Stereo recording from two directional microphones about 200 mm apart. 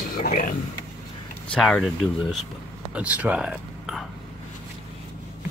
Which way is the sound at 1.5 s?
Centre (ahead or behind).